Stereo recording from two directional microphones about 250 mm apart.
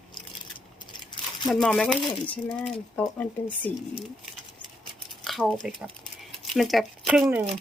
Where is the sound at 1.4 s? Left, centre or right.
Centre.